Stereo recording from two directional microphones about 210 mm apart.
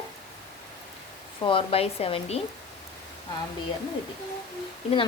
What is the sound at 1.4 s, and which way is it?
A woman's voice, 25° left (ahead or behind).